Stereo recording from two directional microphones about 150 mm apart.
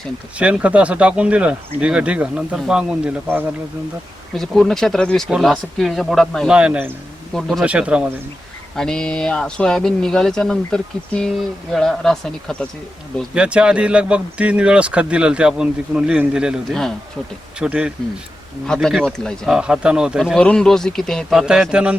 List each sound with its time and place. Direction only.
0.3 s speech: 10° right (ahead or behind)
4.4 s speech: 5° left (ahead or behind)
7.3 s speech: 5° left (ahead or behind)
7.6 s speech: 10° right (ahead or behind)
8.7 s speech: 5° left (ahead or behind)